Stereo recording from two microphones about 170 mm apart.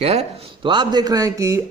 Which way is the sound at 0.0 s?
40° right (ahead or behind).